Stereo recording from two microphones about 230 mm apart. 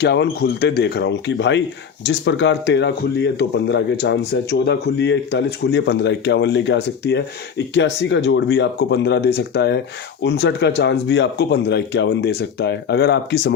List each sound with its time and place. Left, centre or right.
0.0 s speech: left